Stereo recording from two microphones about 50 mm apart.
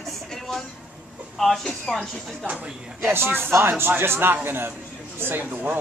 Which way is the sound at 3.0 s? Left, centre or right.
Right.